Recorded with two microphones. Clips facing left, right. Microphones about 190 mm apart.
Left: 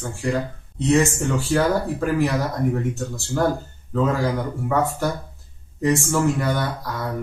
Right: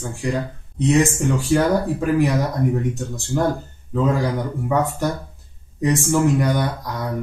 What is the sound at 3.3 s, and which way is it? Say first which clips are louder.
Speech: right 1 dB; 10° right (ahead or behind).